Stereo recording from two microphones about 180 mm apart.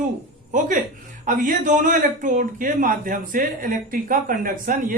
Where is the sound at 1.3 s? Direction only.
45° right (ahead or behind).